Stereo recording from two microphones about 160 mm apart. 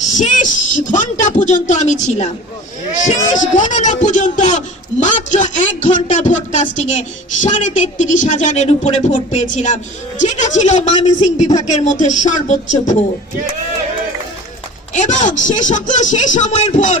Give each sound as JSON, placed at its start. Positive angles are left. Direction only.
{"t": 0.2, "sound": "a man's voice", "side_deg": 50}
{"t": 14.9, "sound": "a man's voice", "side_deg": 50}